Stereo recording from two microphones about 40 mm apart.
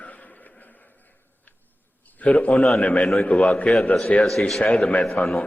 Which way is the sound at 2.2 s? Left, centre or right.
Left.